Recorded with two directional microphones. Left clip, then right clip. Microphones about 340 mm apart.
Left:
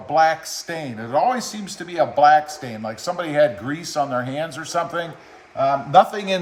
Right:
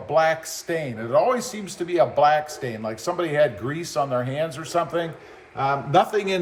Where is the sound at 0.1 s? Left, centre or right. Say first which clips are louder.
Left 3 dB; centre.